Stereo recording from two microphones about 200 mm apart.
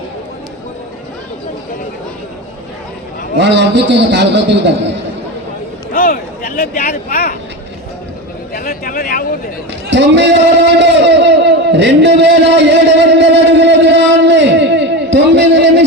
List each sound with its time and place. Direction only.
3.3 s a man's voice: 60° right (ahead or behind)
5.9 s a sound: 45° left (ahead or behind)
6.6 s speech: 45° left (ahead or behind)
8.5 s speech: 45° left (ahead or behind)
9.9 s a man's voice: 60° right (ahead or behind)
10.8 s a sound: 60° right (ahead or behind)